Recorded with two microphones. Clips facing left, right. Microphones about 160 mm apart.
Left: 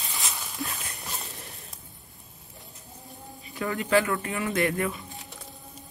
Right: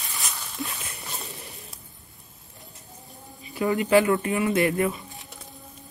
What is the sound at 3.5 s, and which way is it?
Speech, 15° right (ahead or behind).